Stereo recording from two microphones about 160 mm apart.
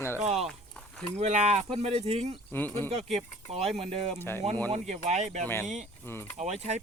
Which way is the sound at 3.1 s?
40° right (ahead or behind).